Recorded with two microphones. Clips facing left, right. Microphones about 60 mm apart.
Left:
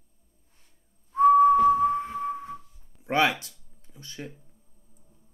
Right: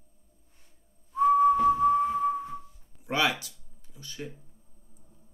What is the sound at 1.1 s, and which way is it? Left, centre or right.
Whistling, left.